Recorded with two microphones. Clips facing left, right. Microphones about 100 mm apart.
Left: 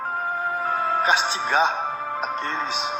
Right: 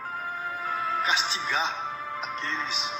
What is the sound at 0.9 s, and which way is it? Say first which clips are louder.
Speech: left 7 dB; 55° left (ahead or behind).